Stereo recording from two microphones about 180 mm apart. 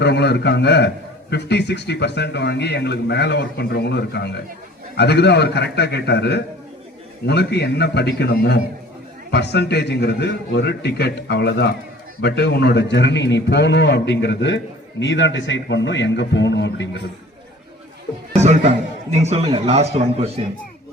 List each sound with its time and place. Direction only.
0.0 s a man's voice: 70° left (ahead or behind)
19.1 s a man's voice: 35° right (ahead or behind)